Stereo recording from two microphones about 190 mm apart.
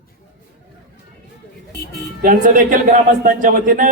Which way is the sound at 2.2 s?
45° right (ahead or behind).